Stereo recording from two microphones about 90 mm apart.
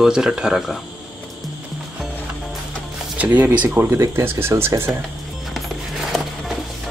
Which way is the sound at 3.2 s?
20° right (ahead or behind).